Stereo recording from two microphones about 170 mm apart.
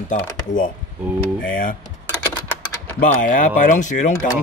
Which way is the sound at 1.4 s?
55° left (ahead or behind).